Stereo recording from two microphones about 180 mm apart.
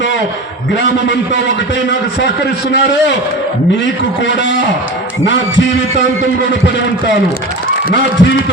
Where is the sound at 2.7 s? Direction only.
75° left (ahead or behind).